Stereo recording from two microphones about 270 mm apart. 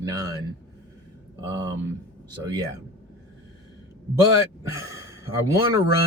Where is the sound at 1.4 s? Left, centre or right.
Centre.